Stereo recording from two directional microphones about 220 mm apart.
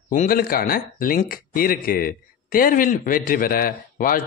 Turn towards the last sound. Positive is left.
turn(degrees=40)  # may be behind; listen again after turning